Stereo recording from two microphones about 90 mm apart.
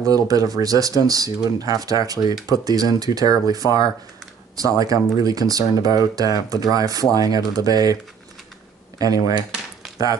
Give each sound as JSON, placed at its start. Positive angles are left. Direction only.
{"t": 0.0, "sound": "speech", "side_deg": -40}